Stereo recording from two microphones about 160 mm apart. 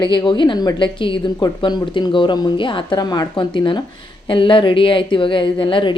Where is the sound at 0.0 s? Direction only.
30° left (ahead or behind).